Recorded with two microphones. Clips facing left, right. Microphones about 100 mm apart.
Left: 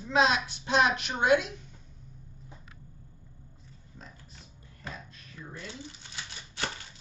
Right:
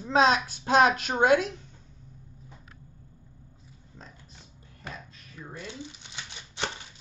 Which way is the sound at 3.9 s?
35° right (ahead or behind).